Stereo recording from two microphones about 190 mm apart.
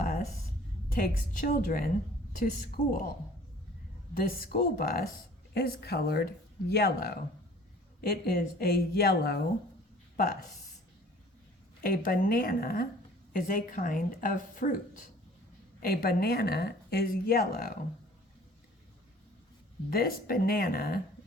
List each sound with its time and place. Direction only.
0.9 s speech: 50° left (ahead or behind)
4.1 s speech: 50° left (ahead or behind)
11.8 s speech: 50° left (ahead or behind)
19.9 s speech: 50° left (ahead or behind)